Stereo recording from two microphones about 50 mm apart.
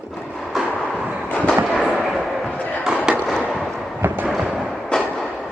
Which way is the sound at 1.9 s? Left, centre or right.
Centre.